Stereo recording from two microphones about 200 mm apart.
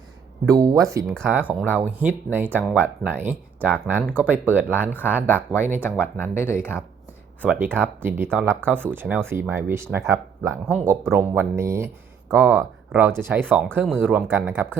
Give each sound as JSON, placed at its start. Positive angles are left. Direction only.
{"t": 0.4, "sound": "speech", "side_deg": -15}
{"t": 5.8, "sound": "speech", "side_deg": 10}
{"t": 7.4, "sound": "speech", "side_deg": -10}
{"t": 10.7, "sound": "speech", "side_deg": 0}